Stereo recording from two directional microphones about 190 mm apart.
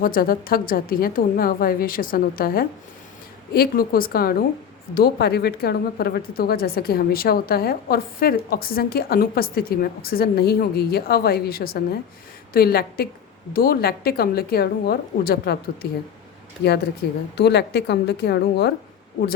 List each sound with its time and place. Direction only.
0.0 s a woman's voice: 50° left (ahead or behind)
17.3 s a woman's voice: 60° left (ahead or behind)